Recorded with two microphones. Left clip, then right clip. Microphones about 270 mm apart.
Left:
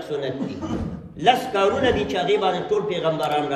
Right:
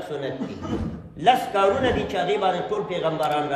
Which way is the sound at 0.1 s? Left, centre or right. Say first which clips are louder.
Left 5 dB; centre.